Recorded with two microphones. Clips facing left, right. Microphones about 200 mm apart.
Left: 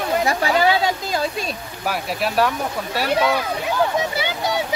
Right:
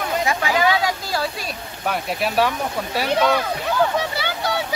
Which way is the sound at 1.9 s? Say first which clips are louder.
Even; centre (ahead or behind).